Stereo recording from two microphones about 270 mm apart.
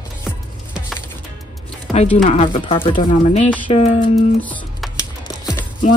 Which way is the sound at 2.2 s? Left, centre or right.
Left.